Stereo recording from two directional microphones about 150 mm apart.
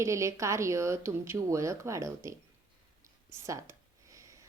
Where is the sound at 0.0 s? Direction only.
20° right (ahead or behind).